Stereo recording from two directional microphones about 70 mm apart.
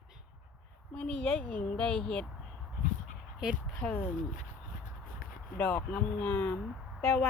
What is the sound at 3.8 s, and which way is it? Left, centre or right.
Speech, centre.